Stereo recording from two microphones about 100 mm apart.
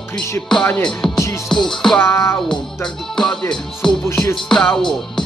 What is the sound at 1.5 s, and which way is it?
Music, 5° left (ahead or behind).